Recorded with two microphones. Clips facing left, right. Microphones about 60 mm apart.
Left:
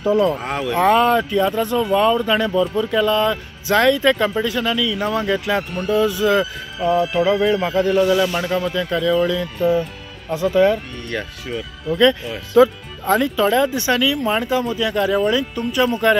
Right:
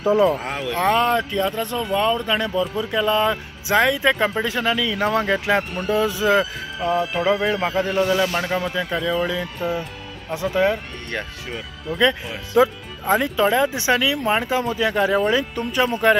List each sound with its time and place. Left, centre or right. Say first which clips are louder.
0.0 s speech: even; centre
0.4 s speech: left 4 dB; centre
3.1 s speech: left 1 dB; right
4.4 s speech: left 1 dB; right
6.8 s speech: left 4 dB; centre
7.2 s speech: left 3 dB; centre